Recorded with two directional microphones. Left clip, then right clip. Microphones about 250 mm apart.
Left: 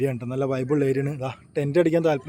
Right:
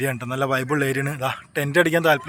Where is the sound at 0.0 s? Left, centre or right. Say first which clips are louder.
Right 2 dB; centre.